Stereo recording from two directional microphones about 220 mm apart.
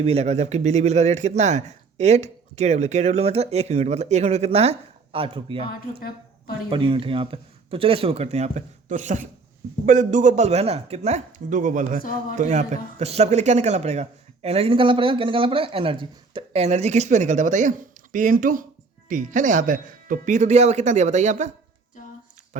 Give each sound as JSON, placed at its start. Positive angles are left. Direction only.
{"t": 0.0, "sound": "a man's voice", "side_deg": -30}